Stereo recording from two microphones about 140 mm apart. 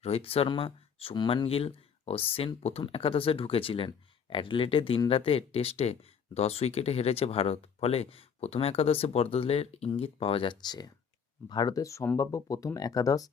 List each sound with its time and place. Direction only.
0.0 s speech: 45° left (ahead or behind); by 13.3 s 25° left (ahead or behind)